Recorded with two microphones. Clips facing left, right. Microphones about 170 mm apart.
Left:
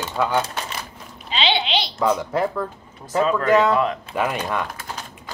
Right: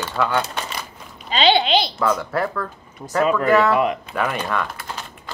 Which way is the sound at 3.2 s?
5° right (ahead or behind).